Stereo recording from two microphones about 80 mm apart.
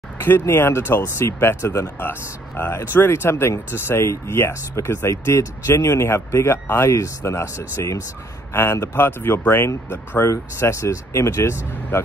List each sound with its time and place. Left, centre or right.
0.2 s speech: left